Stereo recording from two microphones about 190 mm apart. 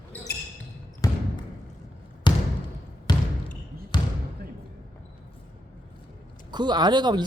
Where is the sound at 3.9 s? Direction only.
20° left (ahead or behind).